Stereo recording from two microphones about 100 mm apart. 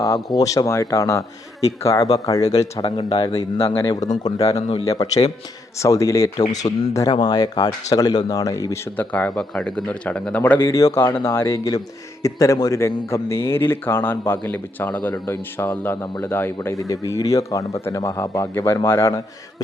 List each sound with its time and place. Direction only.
0.3 s speech: 35° left (ahead or behind)
2.8 s speech: 60° left (ahead or behind)
3.3 s speech: 85° left
3.8 s speech: 40° left (ahead or behind)
9.0 s speech: 15° left (ahead or behind)
10.7 s speech: 30° left (ahead or behind)
16.8 s speech: 35° left (ahead or behind)